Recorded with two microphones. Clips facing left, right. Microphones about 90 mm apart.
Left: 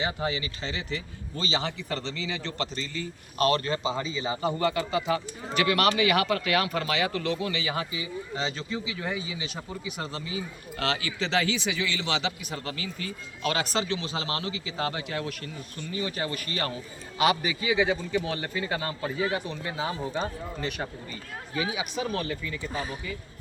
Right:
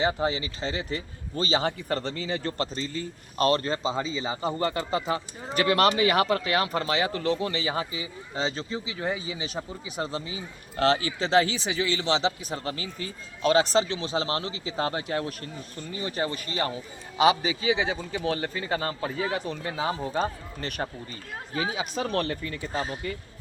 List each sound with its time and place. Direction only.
0.0 s speech: 35° right (ahead or behind)
21.5 s speech: 35° right (ahead or behind)
21.9 s speech: 60° right (ahead or behind)